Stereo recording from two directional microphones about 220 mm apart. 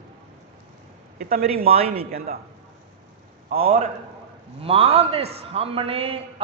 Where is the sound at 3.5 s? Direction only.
25° right (ahead or behind).